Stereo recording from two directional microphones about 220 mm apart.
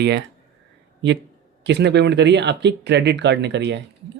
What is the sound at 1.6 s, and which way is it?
Speech, 50° right (ahead or behind).